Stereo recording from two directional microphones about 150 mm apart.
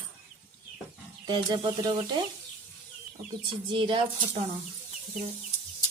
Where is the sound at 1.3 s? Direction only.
30° right (ahead or behind).